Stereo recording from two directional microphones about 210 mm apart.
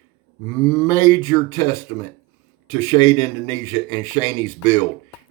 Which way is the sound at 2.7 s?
20° left (ahead or behind).